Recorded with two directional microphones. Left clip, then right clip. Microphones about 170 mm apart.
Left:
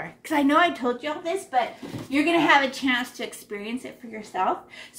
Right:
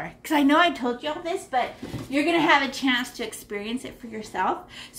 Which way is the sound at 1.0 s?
5° left (ahead or behind).